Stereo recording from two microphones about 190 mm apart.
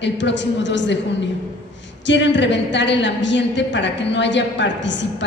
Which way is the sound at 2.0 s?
70° left (ahead or behind).